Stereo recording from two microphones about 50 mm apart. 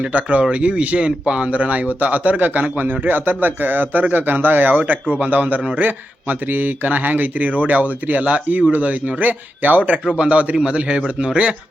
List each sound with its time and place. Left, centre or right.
0.0 s a man's voice: right